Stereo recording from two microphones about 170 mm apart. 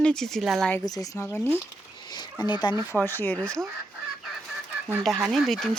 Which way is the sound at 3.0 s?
10° left (ahead or behind).